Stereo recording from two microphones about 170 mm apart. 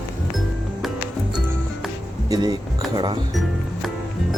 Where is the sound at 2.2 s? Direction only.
20° right (ahead or behind).